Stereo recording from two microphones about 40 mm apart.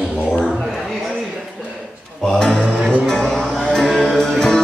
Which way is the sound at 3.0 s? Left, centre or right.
Centre.